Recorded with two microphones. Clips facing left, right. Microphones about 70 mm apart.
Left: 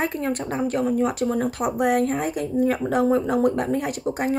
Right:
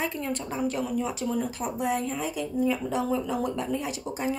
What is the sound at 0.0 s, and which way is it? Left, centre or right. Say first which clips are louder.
A woman's voice: left 6 dB; left.